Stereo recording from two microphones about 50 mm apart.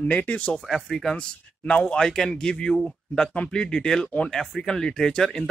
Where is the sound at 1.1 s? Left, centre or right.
Left.